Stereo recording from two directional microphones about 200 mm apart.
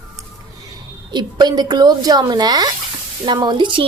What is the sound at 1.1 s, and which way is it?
Speech, 20° right (ahead or behind).